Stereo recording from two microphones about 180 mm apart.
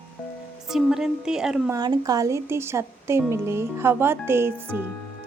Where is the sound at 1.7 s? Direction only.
20° right (ahead or behind).